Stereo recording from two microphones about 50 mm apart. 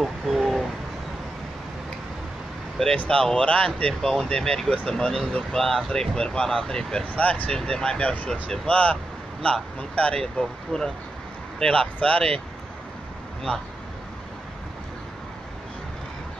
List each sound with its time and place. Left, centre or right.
0.0 s a sound: centre
3.0 s speech: left
7.2 s speech: left
7.5 s speech: centre
8.6 s speech: left
10.2 s speech: centre
13.5 s speech: left